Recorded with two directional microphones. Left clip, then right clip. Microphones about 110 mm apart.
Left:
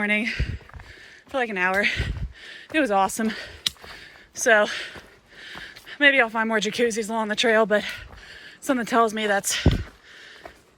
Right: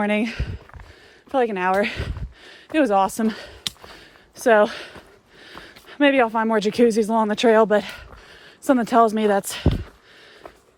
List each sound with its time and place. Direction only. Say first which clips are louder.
0.0 s speech: right 1 dB; 50° right (ahead or behind)
2.9 s speech: right 2 dB; 30° right (ahead or behind)